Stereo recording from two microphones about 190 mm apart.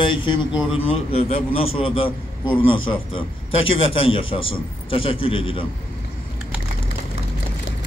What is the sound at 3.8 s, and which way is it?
A man's voice, 30° left (ahead or behind).